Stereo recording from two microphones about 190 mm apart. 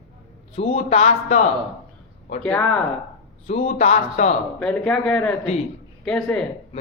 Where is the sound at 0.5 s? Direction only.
30° left (ahead or behind).